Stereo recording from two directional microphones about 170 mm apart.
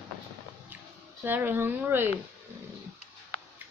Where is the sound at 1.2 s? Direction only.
10° right (ahead or behind).